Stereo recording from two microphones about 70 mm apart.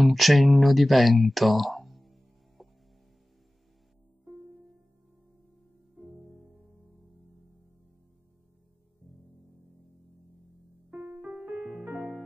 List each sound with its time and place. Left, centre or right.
0.0 s speech: centre
10.9 s music: right